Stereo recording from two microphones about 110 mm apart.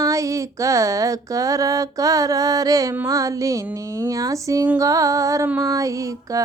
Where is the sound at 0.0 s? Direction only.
30° right (ahead or behind).